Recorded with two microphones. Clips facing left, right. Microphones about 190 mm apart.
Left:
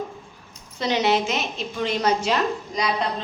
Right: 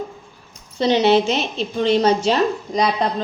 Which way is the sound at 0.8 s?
30° right (ahead or behind).